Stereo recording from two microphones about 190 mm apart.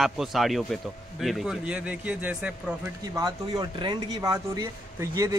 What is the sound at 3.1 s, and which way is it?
Speech, 20° right (ahead or behind).